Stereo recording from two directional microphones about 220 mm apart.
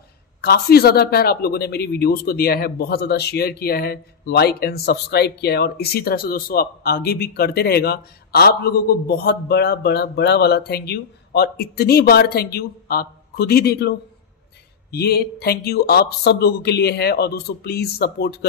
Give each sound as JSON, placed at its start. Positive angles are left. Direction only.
{"t": 0.4, "sound": "a man's voice", "side_deg": 45}